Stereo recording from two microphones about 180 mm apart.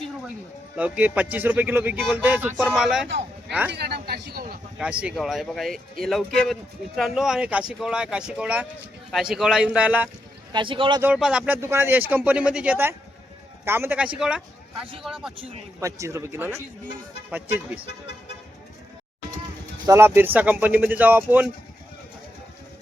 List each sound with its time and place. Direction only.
0.8 s speech: 10° right (ahead or behind)
3.7 s speech: 65° right (ahead or behind)
4.8 s speech: 5° right (ahead or behind)
10.5 s speech: 25° right (ahead or behind)
11.0 s speech: 5° right (ahead or behind)
15.8 s speech: 15° right (ahead or behind)
19.8 s speech: 15° right (ahead or behind)